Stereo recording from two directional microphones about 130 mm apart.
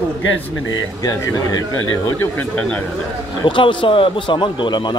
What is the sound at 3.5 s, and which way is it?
Speech, 40° left (ahead or behind).